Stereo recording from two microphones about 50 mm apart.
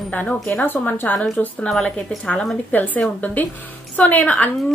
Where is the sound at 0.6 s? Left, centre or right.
Left.